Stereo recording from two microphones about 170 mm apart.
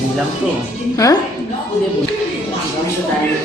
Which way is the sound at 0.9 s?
20° left (ahead or behind).